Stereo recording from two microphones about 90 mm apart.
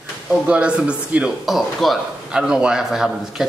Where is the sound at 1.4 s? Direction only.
Centre (ahead or behind).